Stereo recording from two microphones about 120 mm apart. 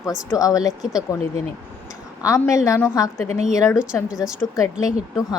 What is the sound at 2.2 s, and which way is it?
Speech, 25° left (ahead or behind).